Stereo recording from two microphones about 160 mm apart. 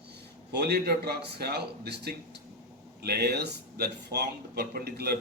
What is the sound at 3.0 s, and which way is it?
Speech, 80° right.